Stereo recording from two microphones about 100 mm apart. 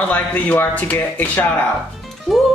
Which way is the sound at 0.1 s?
15° left (ahead or behind).